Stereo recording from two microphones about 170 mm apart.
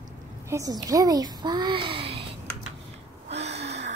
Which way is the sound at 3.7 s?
40° right (ahead or behind).